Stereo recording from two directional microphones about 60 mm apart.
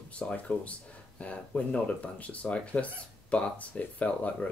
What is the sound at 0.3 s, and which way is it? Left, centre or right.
Speech, left.